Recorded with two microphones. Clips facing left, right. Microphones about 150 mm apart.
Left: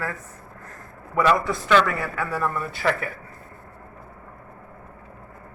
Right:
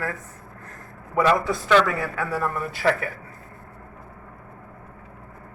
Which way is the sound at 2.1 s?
45° right (ahead or behind).